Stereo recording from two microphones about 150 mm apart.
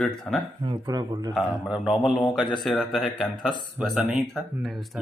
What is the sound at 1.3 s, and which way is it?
Speech, centre (ahead or behind).